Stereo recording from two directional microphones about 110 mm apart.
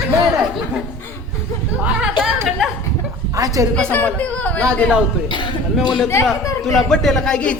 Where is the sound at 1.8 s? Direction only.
10° right (ahead or behind).